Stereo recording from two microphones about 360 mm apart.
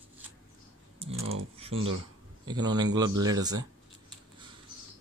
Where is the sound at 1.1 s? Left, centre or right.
Right.